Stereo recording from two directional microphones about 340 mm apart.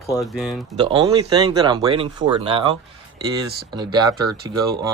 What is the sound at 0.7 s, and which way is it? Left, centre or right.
Speech, centre.